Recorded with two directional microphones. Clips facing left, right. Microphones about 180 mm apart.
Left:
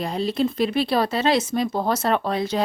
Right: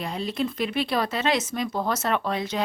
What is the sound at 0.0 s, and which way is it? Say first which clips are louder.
A woman's voice: left 5 dB; 35° left (ahead or behind).